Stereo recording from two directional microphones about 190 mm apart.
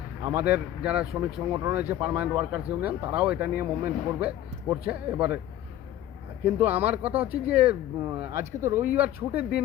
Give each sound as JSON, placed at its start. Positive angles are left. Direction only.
{"t": 0.3, "sound": "speech", "side_deg": -10}
{"t": 1.5, "sound": "speech", "side_deg": -15}
{"t": 6.4, "sound": "speech", "side_deg": -10}